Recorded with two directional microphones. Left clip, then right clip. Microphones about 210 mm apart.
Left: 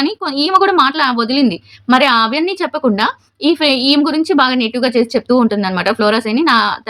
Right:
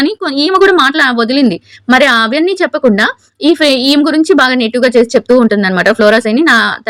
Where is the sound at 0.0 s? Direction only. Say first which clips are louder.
Right 4 dB; 25° right (ahead or behind).